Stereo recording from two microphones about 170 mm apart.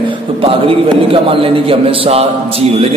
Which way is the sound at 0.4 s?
30° right (ahead or behind).